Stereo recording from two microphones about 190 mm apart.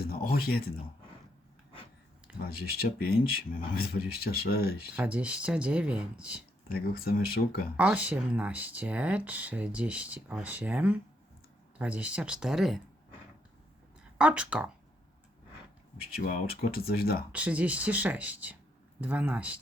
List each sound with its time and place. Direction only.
0.0 s speech: 50° left (ahead or behind)
2.4 s speech: 55° left (ahead or behind)
4.9 s speech: 5° right (ahead or behind)
6.7 s speech: 55° left (ahead or behind)
7.8 s speech: 5° right (ahead or behind)
14.2 s speech: 5° right (ahead or behind)
16.1 s speech: 50° left (ahead or behind)
17.3 s speech: 5° right (ahead or behind)